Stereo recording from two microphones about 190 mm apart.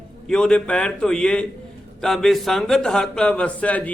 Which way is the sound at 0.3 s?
5° left (ahead or behind).